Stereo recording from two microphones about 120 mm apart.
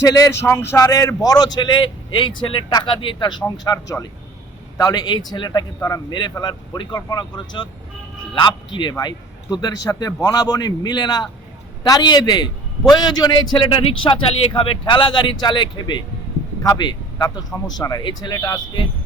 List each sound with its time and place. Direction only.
0.0 s a man's voice: 30° left (ahead or behind)